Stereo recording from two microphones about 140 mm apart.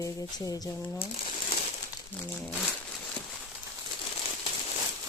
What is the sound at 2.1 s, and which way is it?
Speech, 15° left (ahead or behind).